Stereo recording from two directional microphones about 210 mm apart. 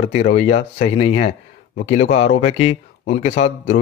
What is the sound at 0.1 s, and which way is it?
A man's voice, 30° left (ahead or behind).